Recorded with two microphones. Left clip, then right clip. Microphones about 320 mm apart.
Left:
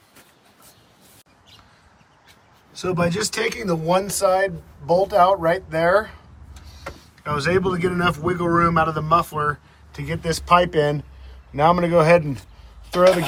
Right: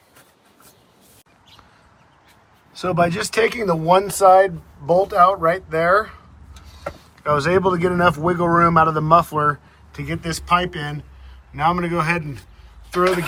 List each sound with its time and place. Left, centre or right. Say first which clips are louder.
2.7 s a man's voice: right 3 dB; centre